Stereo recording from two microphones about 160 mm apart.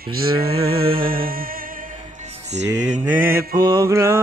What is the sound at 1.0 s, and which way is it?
Music, 65° right (ahead or behind).